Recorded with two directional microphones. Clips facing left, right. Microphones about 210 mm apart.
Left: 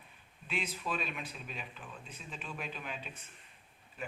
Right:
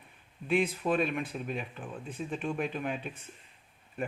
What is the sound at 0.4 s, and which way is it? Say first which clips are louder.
A man's voice: right 11 dB; 50° right (ahead or behind).